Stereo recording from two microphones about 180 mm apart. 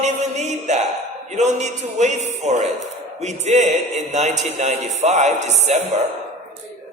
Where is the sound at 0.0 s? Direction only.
40° right (ahead or behind).